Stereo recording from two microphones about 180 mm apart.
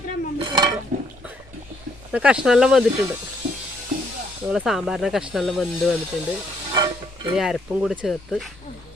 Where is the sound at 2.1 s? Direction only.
5° right (ahead or behind).